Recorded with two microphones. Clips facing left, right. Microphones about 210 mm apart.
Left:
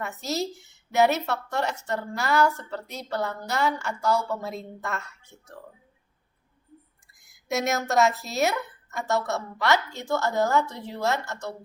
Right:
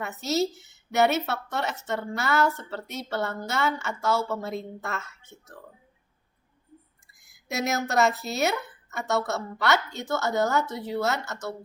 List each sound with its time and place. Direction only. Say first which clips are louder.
0.2 s a woman's voice: right 5 dB; centre (ahead or behind)
7.3 s a woman's voice: left 2 dB; centre (ahead or behind)